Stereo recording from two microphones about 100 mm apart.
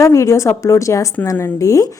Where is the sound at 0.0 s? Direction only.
30° left (ahead or behind).